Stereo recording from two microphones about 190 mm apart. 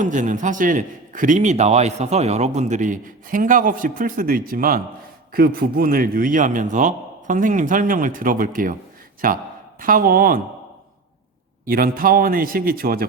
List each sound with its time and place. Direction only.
0.0 s a man's voice: 40° right (ahead or behind)
11.6 s a man's voice: 50° right (ahead or behind)